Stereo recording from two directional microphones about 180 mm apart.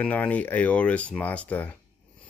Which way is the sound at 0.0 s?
5° left (ahead or behind).